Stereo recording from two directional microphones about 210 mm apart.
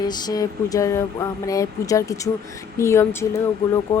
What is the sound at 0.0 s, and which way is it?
A woman's voice, 20° left (ahead or behind).